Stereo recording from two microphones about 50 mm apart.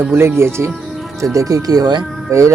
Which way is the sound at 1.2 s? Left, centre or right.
Right.